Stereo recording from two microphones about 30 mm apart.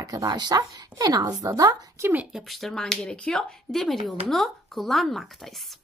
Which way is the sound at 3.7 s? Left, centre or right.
Centre.